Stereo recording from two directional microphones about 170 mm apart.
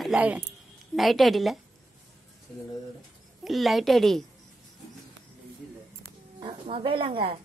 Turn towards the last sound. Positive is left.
turn(degrees=-30)  # may be behind; listen again after turning